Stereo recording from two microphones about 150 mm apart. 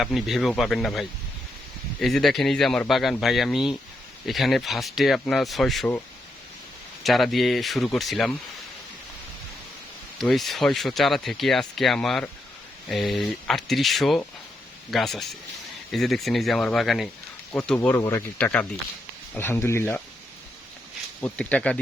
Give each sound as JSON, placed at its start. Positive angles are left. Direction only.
{"t": 0.0, "sound": "speech", "side_deg": 0}
{"t": 7.0, "sound": "speech", "side_deg": 0}
{"t": 10.2, "sound": "speech", "side_deg": 0}
{"t": 17.7, "sound": "speech", "side_deg": 15}
{"t": 21.2, "sound": "speech", "side_deg": 10}